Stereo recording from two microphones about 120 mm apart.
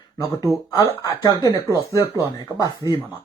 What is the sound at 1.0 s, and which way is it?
Speech, 30° left (ahead or behind).